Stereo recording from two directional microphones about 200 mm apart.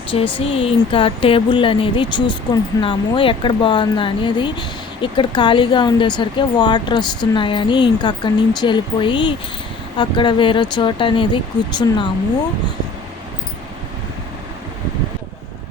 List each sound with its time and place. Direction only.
0.3 s speech: 25° left (ahead or behind)